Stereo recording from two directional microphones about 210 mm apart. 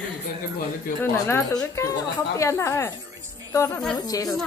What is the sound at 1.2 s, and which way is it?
Speech, 10° left (ahead or behind).